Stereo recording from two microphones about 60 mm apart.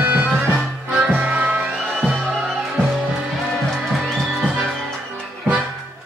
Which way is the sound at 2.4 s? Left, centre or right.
Centre.